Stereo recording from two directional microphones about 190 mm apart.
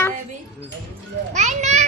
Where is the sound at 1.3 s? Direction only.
35° right (ahead or behind).